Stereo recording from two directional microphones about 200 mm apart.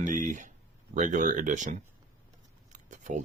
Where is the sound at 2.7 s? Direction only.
40° right (ahead or behind).